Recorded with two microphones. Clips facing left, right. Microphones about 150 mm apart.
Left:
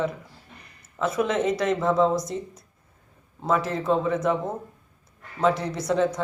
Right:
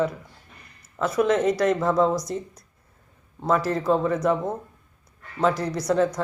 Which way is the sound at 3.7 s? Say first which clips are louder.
Right 2 dB; centre (ahead or behind).